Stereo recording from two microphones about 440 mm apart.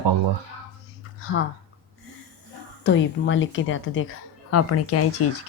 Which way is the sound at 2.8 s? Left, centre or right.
Left.